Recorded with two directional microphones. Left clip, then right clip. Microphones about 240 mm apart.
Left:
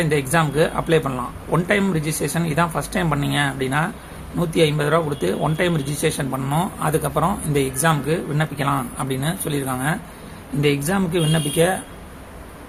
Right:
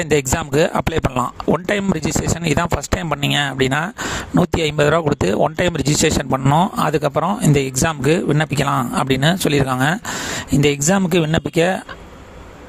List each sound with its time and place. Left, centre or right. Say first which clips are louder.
0.0 s speech: right 1 dB; right